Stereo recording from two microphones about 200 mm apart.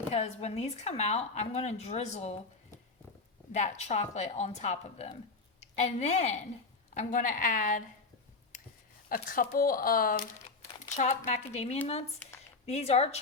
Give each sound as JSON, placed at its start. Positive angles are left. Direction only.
{"t": 0.1, "sound": "speech", "side_deg": 35}
{"t": 3.5, "sound": "a woman's voice", "side_deg": 35}
{"t": 9.0, "sound": "speech", "side_deg": 45}